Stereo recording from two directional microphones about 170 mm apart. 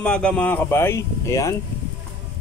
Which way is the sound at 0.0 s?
5° left (ahead or behind).